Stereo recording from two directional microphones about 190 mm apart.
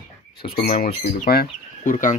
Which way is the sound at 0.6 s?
45° left (ahead or behind).